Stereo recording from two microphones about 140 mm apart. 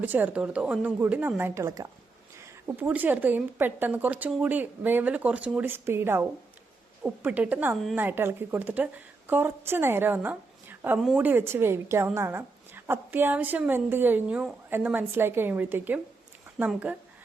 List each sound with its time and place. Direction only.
0.0 s a woman's voice: 15° right (ahead or behind)